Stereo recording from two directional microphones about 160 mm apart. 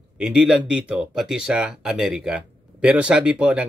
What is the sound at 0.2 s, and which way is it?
Speech, 5° right (ahead or behind).